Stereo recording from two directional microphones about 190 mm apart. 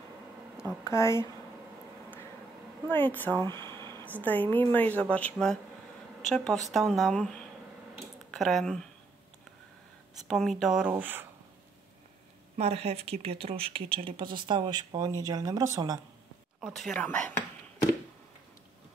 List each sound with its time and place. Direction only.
0.8 s a woman's voice: 15° left (ahead or behind)
2.9 s a woman's voice: 10° left (ahead or behind)
3.3 s speech: 20° right (ahead or behind)
4.2 s a woman's voice: 10° left (ahead or behind)
10.2 s a woman's voice: centre (ahead or behind)
12.5 s speech: 35° right (ahead or behind); by 16.0 s 20° right (ahead or behind)
16.6 s a woman's voice: centre (ahead or behind)